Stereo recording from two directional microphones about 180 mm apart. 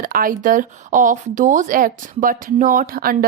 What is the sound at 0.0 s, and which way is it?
A woman's voice, 50° right (ahead or behind).